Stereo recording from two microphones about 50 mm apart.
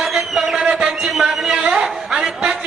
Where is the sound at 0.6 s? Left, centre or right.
Right.